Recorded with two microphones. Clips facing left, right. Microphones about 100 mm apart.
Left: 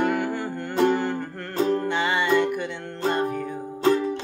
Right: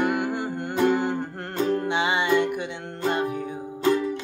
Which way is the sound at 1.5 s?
25° left (ahead or behind).